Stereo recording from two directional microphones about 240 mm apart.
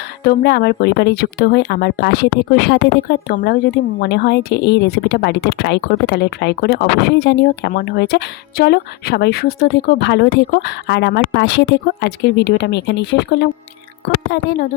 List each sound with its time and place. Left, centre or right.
0.3 s speech: left